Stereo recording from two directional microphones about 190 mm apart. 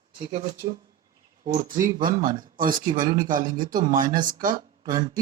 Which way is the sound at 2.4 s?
45° right (ahead or behind).